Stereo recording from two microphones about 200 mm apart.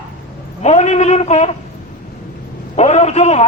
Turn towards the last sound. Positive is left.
turn(degrees=35)  # may be behind; listen again after turning